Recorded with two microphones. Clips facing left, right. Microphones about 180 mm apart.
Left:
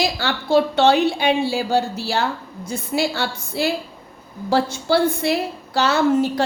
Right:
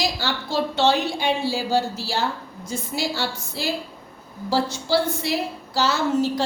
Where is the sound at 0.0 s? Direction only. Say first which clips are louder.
Left 3 dB; 60° left (ahead or behind).